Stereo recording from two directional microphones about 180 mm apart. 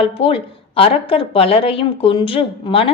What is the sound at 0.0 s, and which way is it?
A woman's voice, 30° left (ahead or behind).